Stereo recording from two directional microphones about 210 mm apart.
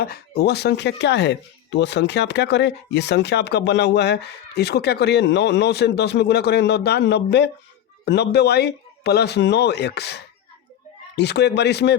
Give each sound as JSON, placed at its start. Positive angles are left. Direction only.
{"t": 0.0, "sound": "speech", "side_deg": 45}